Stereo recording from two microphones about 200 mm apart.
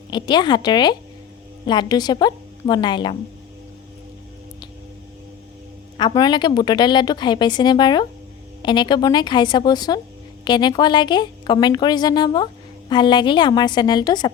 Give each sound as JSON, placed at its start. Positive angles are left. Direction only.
{"t": 0.1, "sound": "a woman's voice", "side_deg": 20}
{"t": 6.0, "sound": "a woman's voice", "side_deg": 20}